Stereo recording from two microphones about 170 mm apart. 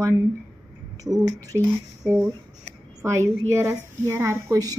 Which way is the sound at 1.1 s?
20° right (ahead or behind).